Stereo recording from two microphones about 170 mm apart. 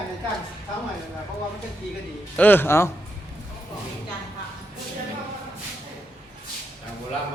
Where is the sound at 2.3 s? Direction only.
10° left (ahead or behind).